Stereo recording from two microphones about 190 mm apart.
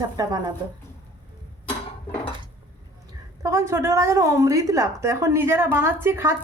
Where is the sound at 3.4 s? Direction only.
15° right (ahead or behind).